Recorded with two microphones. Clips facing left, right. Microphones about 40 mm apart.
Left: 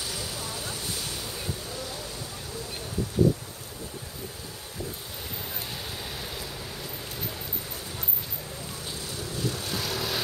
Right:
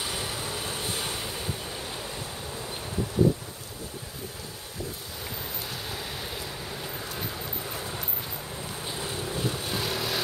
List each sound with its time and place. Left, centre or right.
0.0 s vehicle: right
9.0 s vehicle: right; by 10.2 s centre